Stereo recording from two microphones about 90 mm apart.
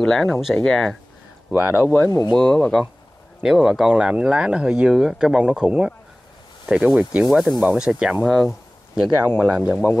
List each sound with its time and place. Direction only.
0.0 s speech: 5° left (ahead or behind)
0.3 s speech: 5° right (ahead or behind)
0.6 s speech: 5° left (ahead or behind)
1.5 s speech: 25° right (ahead or behind)
2.3 s speech: 5° left (ahead or behind)
3.4 s speech: 5° right (ahead or behind)
7.2 s speech: centre (ahead or behind)
8.5 s a sound: 10° right (ahead or behind)
9.4 s speech: 10° right (ahead or behind)